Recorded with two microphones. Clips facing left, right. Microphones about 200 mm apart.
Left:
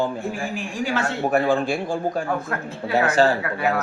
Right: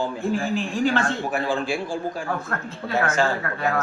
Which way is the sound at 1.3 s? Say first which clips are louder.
Left 8 dB; 55° left (ahead or behind).